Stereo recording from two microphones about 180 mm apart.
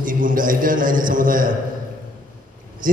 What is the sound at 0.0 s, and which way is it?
A man's voice, 50° right (ahead or behind).